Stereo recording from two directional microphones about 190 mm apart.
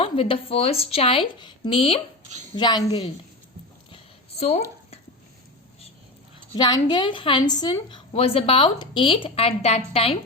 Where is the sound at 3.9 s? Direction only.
35° left (ahead or behind).